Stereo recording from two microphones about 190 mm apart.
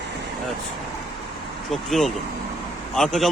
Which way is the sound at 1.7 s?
Centre (ahead or behind).